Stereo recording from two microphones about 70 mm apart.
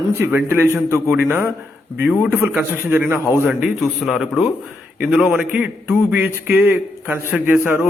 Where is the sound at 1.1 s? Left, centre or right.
Right.